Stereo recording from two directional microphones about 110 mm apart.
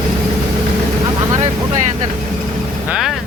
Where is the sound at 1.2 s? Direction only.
35° right (ahead or behind).